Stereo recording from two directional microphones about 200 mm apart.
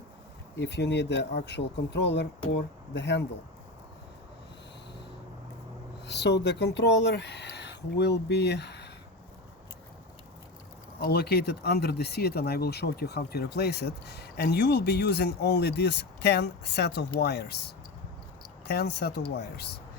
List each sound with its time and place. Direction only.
0.6 s speech: 60° left (ahead or behind)
6.1 s speech: 60° left (ahead or behind)
11.0 s speech: 55° left (ahead or behind)